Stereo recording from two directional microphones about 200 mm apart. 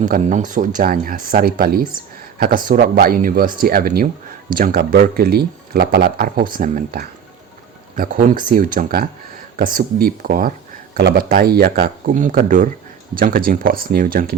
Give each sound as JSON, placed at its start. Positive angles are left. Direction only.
{"t": 0.0, "sound": "speech", "side_deg": -40}